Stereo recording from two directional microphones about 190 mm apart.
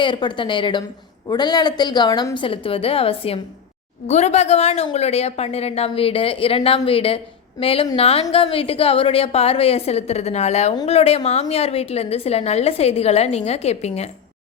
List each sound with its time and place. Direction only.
0.0 s a woman's voice: 25° left (ahead or behind)